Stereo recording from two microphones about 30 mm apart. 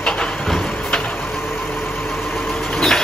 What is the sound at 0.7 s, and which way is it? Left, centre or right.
Vehicle, left.